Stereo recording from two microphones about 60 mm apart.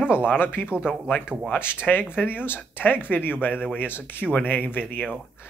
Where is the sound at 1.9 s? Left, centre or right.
Left.